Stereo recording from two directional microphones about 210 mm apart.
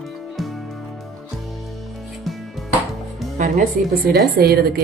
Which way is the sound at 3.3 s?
35° right (ahead or behind).